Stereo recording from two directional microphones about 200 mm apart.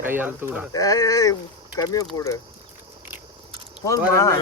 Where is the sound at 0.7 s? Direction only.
15° left (ahead or behind).